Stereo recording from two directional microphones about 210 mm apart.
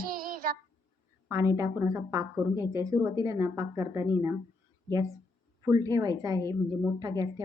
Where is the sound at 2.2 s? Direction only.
15° left (ahead or behind).